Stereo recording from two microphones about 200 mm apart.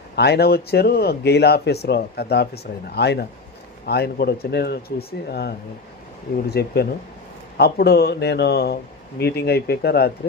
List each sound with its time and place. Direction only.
0.2 s speech: 55° left (ahead or behind)